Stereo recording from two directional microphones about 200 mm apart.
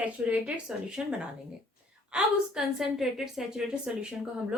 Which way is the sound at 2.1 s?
Centre (ahead or behind).